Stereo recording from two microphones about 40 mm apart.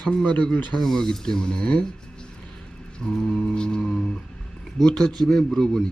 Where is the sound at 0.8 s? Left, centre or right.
Centre.